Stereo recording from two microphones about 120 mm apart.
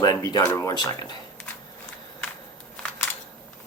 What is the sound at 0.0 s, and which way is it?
Speech, 30° left (ahead or behind).